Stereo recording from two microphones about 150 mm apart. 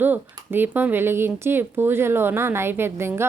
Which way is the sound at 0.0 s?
15° right (ahead or behind).